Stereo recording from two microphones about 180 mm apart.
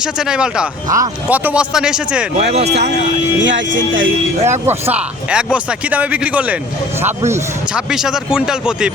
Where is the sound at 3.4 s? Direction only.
90° right.